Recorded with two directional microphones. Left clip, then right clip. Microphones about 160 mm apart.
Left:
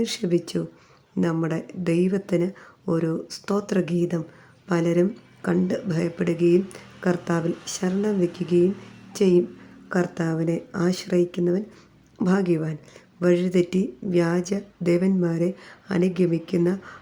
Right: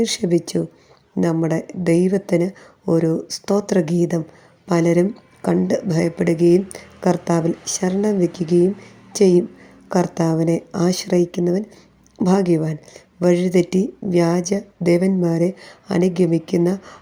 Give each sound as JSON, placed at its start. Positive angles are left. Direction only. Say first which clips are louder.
{"t": 0.0, "sound": "speech", "louder": "right 5 dB", "side_deg": -15}